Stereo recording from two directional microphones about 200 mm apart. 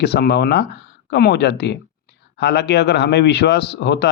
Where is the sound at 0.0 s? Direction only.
55° left (ahead or behind).